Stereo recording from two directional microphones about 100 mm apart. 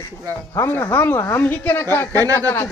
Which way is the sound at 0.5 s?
25° left (ahead or behind).